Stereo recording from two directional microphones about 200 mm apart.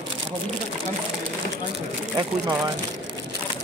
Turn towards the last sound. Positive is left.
turn(degrees=-20)  # may be behind; listen again after turning